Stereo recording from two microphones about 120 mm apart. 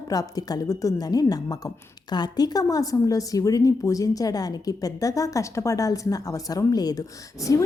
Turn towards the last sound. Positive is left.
turn(degrees=25)  # may be behind; listen again after turning